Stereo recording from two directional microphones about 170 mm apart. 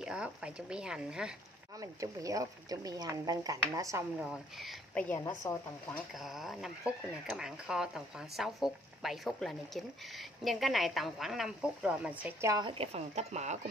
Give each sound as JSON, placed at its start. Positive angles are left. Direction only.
{"t": 0.0, "sound": "speech", "side_deg": -5}
{"t": 1.8, "sound": "speech", "side_deg": -20}
{"t": 4.2, "sound": "speech", "side_deg": 0}
{"t": 5.0, "sound": "speech", "side_deg": 15}
{"t": 6.1, "sound": "speech", "side_deg": 0}
{"t": 12.6, "sound": "speech", "side_deg": -35}